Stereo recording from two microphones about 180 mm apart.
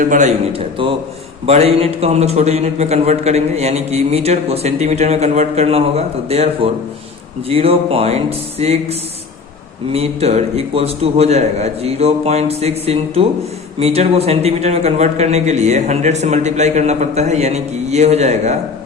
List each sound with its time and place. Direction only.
0.0 s a man's voice: 45° right (ahead or behind)
0.8 s a man's voice: 30° right (ahead or behind)